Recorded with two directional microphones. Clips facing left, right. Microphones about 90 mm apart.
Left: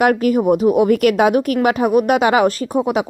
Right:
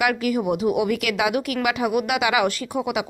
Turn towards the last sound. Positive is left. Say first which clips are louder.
# left 7 dB
turn(degrees=40)  # may be behind; listen again after turning